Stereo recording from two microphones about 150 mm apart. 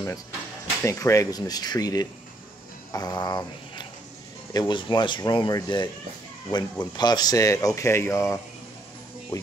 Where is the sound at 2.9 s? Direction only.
25° left (ahead or behind).